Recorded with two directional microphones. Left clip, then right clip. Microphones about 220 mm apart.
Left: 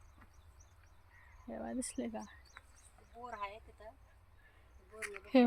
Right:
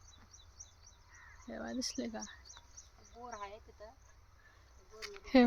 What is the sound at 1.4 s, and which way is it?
Speech, 5° left (ahead or behind).